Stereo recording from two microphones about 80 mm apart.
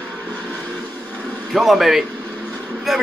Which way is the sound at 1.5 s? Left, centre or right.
Centre.